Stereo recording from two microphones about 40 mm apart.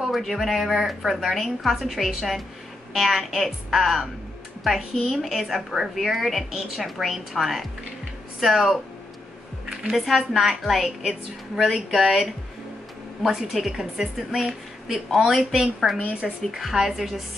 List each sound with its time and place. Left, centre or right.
0.0 s a woman's voice: centre
9.9 s a woman's voice: centre
12.0 s a woman's voice: centre
15.5 s a woman's voice: centre
16.5 s a woman's voice: centre